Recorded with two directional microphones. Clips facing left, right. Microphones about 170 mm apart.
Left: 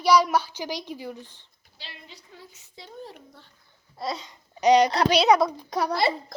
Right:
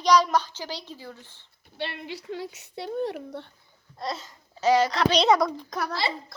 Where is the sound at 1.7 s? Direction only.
65° right (ahead or behind).